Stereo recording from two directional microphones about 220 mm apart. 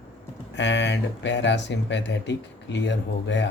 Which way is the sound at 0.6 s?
50° left (ahead or behind).